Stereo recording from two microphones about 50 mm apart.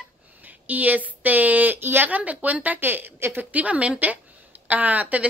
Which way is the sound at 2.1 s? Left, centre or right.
Right.